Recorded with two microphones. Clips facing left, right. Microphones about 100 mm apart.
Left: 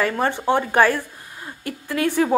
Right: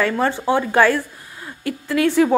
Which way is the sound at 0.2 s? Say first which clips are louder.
Right 1 dB; 25° left (ahead or behind).